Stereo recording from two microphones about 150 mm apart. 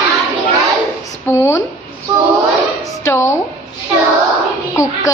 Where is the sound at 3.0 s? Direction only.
20° left (ahead or behind).